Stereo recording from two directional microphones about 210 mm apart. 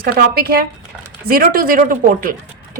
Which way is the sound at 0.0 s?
45° right (ahead or behind).